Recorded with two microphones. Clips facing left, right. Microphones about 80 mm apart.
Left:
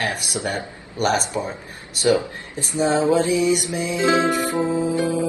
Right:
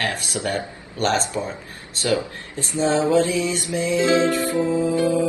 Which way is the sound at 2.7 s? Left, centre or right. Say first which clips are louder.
Even; left.